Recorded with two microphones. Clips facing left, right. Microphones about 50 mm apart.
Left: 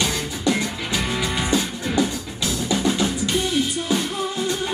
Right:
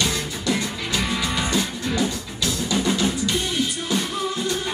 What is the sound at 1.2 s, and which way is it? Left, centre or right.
Music, left.